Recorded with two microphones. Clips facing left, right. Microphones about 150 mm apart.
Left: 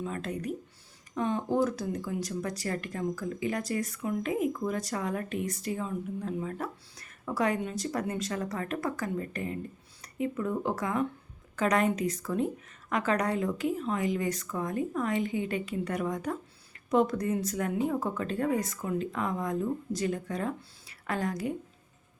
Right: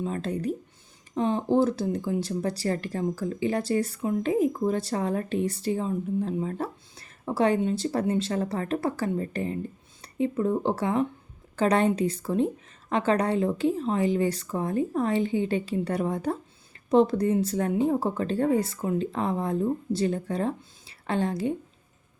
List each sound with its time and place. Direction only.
0.0 s speech: 30° right (ahead or behind)